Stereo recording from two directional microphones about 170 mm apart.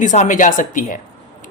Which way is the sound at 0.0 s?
45° left (ahead or behind).